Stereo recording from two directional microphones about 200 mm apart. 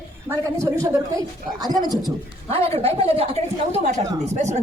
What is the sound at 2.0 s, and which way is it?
Speech, 30° right (ahead or behind).